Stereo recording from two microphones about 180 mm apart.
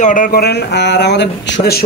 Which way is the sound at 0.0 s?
50° left (ahead or behind).